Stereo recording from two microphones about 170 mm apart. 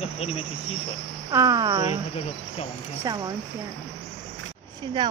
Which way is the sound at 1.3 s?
20° right (ahead or behind).